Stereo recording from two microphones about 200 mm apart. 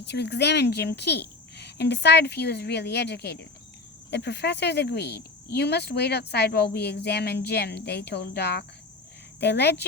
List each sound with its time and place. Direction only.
0.0 s speech: 55° left (ahead or behind)